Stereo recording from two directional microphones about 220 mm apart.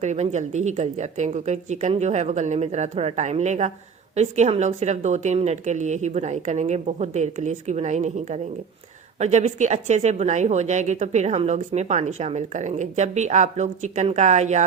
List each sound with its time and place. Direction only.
0.0 s speech: 30° right (ahead or behind)